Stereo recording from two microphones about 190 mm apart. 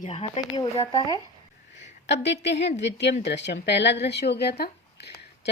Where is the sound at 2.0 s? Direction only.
65° left (ahead or behind).